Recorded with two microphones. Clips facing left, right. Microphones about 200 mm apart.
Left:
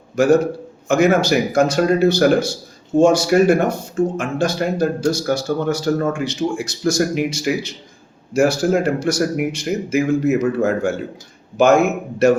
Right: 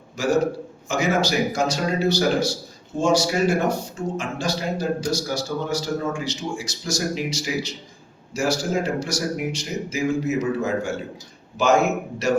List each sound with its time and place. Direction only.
0.2 s speech: 55° left (ahead or behind)